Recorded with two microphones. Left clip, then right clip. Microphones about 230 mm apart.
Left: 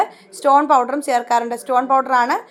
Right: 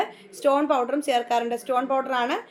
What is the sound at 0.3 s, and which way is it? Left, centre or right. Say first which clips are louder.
A woman's voice: left 8 dB; left.